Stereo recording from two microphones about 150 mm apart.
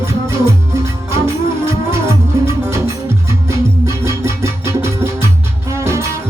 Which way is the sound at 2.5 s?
20° right (ahead or behind).